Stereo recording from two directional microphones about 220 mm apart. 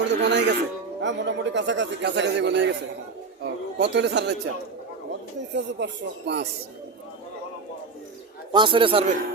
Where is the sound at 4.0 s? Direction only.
50° right (ahead or behind).